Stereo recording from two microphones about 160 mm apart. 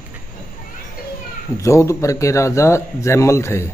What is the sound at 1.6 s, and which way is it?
Speech, 20° left (ahead or behind).